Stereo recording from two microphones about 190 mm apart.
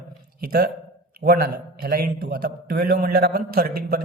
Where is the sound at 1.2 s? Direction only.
55° right (ahead or behind).